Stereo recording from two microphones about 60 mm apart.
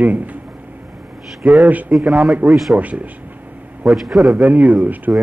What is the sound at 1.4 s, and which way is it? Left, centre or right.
Speech, right.